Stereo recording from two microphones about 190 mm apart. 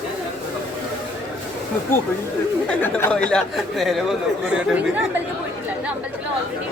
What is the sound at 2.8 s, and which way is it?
Speech, 5° left (ahead or behind).